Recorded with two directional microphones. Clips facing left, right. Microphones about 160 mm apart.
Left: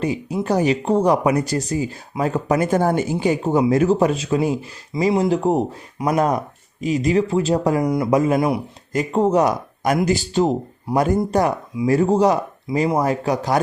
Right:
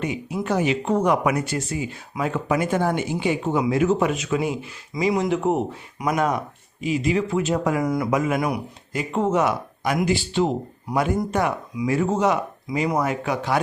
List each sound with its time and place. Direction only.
0.0 s speech: 35° left (ahead or behind)
7.9 s speech: 20° left (ahead or behind)
8.1 s speech: 35° left (ahead or behind)
8.9 s speech: 40° left (ahead or behind)